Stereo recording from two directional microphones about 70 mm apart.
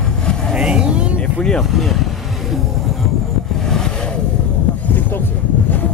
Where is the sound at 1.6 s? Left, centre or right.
Centre.